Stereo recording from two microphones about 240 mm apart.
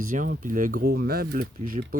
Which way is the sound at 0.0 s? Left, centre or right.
Right.